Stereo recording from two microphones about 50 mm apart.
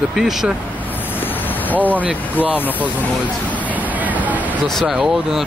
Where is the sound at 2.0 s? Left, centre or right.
Right.